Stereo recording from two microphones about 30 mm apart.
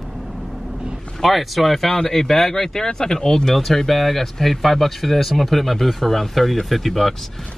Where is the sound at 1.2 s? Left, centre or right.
Centre.